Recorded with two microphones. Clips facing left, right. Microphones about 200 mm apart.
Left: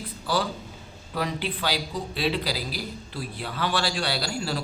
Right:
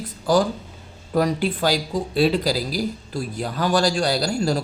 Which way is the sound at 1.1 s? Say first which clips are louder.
Right 9 dB; 45° right (ahead or behind).